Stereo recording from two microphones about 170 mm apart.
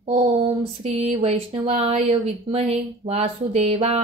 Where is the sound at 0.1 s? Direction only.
30° right (ahead or behind).